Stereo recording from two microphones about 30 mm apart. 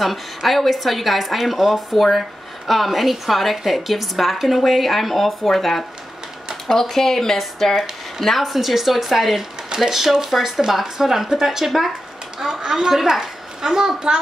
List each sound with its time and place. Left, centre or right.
0.0 s speech: centre
8.5 s a woman's voice: centre